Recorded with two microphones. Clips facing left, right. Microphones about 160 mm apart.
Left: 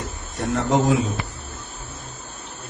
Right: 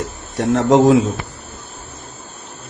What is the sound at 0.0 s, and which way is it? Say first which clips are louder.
Speech: right 7 dB; 90° right.